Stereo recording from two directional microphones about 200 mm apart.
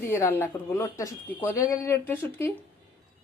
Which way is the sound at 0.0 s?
10° left (ahead or behind).